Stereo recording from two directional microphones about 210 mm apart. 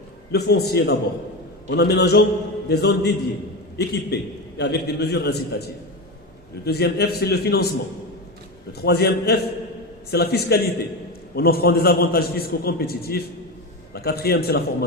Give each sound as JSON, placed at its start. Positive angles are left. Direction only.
{"t": 0.3, "sound": "a man's voice", "side_deg": 50}
{"t": 6.7, "sound": "a man's voice", "side_deg": 50}
{"t": 8.8, "sound": "a man's voice", "side_deg": 50}